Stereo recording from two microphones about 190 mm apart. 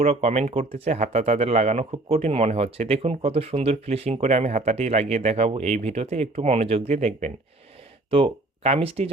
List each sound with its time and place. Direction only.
0.0 s speech: 30° right (ahead or behind)